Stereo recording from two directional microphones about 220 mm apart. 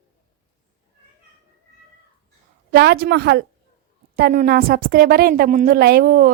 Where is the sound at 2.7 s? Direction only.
45° right (ahead or behind).